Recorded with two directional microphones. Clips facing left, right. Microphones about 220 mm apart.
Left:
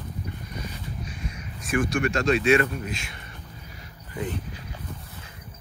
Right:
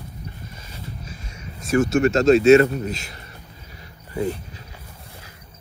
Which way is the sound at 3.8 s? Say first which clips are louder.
Right 7 dB; 35° right (ahead or behind).